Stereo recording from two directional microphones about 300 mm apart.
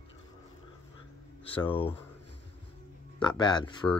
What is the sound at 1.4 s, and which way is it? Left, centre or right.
Speech, centre.